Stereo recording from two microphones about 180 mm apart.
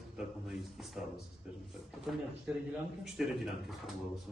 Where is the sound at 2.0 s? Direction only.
Centre (ahead or behind).